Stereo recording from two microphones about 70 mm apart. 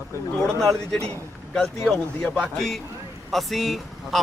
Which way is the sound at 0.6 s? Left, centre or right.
Centre.